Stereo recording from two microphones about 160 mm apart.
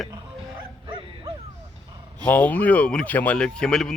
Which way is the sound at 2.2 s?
10° left (ahead or behind).